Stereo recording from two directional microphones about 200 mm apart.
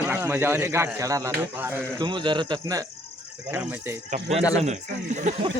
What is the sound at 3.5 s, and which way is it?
Speech, 10° right (ahead or behind).